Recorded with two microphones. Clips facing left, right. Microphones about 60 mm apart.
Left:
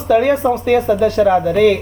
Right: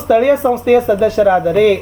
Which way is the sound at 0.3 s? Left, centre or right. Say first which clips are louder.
Right 2 dB; centre.